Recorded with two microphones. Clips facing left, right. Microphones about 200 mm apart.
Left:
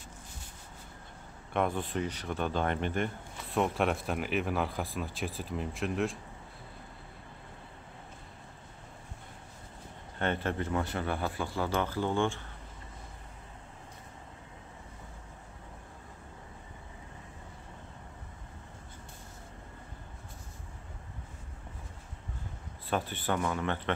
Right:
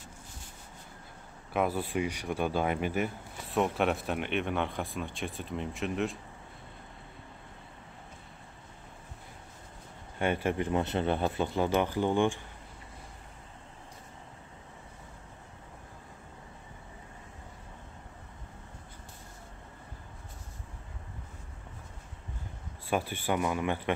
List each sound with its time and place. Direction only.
1.5 s speech: 5° right (ahead or behind)
10.1 s speech: 10° right (ahead or behind)
22.8 s speech: 10° right (ahead or behind)